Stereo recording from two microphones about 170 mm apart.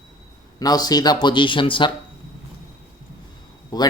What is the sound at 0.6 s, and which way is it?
Speech, 20° left (ahead or behind).